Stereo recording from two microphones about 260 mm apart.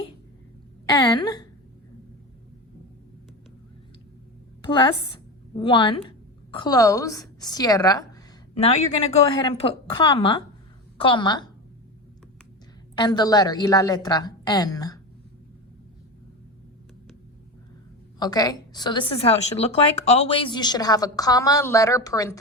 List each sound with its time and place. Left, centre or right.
0.9 s a woman's voice: centre
4.6 s a woman's voice: centre
9.1 s a woman's voice: left
13.0 s a woman's voice: centre
18.2 s a woman's voice: centre